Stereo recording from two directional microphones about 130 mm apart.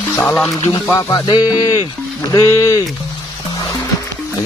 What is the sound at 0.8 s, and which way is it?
Speech, 25° left (ahead or behind).